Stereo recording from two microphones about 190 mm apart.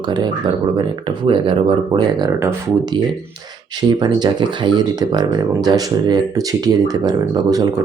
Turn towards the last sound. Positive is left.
turn(degrees=-20)  # may be behind; listen again after turning